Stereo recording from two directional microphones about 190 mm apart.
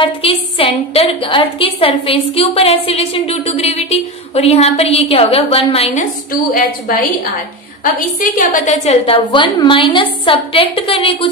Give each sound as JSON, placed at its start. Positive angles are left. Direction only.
{"t": 0.0, "sound": "a woman's voice", "side_deg": 30}
{"t": 6.5, "sound": "a woman's voice", "side_deg": 45}